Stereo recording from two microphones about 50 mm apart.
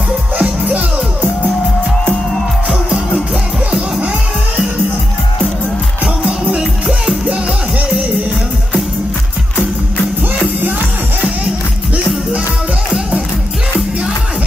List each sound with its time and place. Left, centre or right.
0.4 s music: right